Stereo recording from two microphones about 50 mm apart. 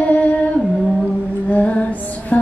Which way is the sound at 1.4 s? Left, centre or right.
Left.